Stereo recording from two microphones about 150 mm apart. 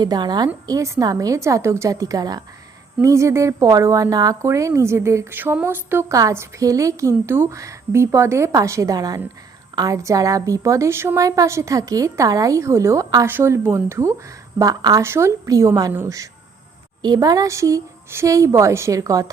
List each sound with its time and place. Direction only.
0.0 s speech: 30° right (ahead or behind)